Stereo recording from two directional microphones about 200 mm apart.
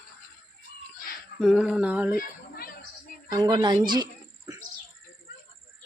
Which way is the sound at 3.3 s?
20° right (ahead or behind).